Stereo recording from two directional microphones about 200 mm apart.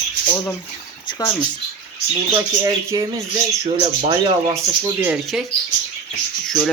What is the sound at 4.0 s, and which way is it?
Speech, 25° right (ahead or behind).